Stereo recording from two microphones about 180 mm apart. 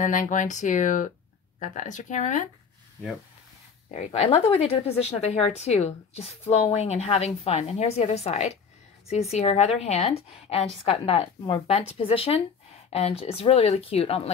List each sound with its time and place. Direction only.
0.0 s speech: 45° left (ahead or behind)
3.9 s speech: 35° left (ahead or behind)